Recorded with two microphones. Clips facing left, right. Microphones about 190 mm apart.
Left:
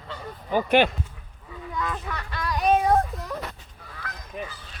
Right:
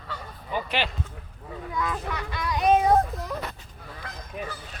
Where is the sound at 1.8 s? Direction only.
10° right (ahead or behind).